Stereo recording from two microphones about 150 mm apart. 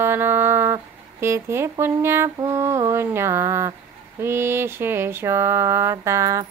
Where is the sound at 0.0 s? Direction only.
15° right (ahead or behind).